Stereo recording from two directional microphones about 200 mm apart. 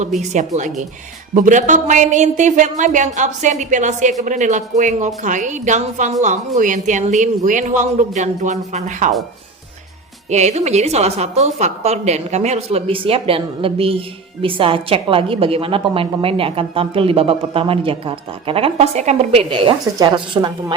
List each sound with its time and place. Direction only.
0.2 s a woman's voice: 35° right (ahead or behind)
10.2 s a woman's voice: 35° right (ahead or behind)